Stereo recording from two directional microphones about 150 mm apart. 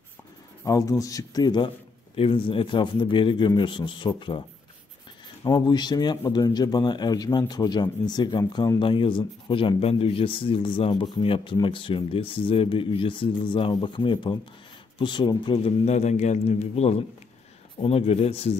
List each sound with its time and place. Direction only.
0.7 s a man's voice: 20° left (ahead or behind)
5.4 s a man's voice: 30° left (ahead or behind)